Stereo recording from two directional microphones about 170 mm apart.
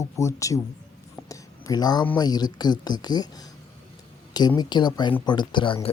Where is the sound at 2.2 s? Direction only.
25° left (ahead or behind).